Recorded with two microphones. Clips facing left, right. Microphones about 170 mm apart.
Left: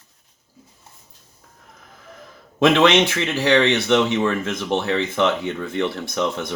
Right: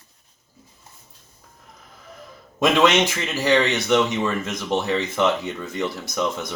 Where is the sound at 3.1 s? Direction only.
65° left (ahead or behind).